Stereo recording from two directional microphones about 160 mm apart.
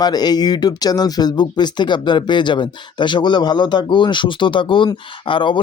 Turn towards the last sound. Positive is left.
turn(degrees=30)  # may be behind; listen again after turning